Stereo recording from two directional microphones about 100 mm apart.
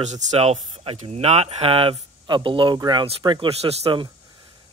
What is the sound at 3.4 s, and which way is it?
Speech, 90° right.